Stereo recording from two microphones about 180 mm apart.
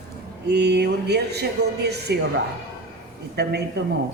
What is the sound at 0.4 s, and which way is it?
A woman's voice, 70° right (ahead or behind).